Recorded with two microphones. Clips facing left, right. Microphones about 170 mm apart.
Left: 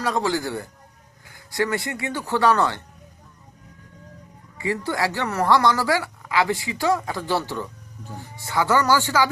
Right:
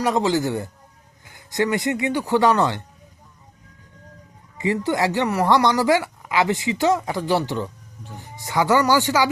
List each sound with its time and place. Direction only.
0.0 s speech: 20° right (ahead or behind)
4.5 s speech: 20° right (ahead or behind)